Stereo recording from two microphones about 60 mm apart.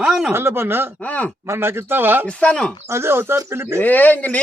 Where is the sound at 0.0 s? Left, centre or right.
Centre.